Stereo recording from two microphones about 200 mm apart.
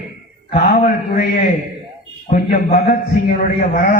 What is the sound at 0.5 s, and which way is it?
Speech, 45° left (ahead or behind).